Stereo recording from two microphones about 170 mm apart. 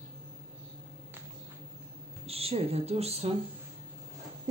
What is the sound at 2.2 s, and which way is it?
Speech, 35° right (ahead or behind).